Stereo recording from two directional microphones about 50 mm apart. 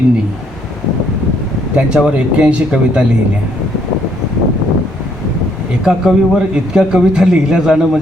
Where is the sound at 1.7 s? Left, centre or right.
Centre.